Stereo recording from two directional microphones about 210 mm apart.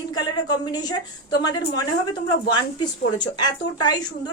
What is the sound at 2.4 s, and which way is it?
Speech, 20° left (ahead or behind).